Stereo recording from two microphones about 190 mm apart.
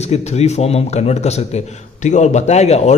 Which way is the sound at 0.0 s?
35° left (ahead or behind).